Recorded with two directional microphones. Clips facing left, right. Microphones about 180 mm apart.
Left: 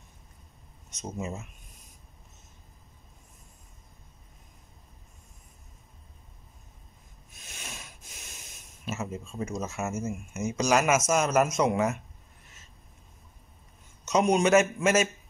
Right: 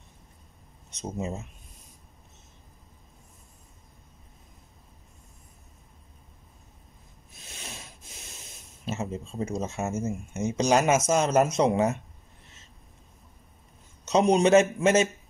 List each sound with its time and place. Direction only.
1.2 s speech: 35° right (ahead or behind)
7.4 s snort: 30° right (ahead or behind)
8.8 s speech: 30° right (ahead or behind)
14.0 s speech: 30° right (ahead or behind)